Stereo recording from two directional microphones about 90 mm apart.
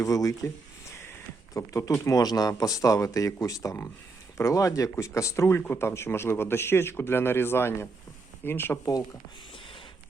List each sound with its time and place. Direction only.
0.0 s speech: 40° left (ahead or behind)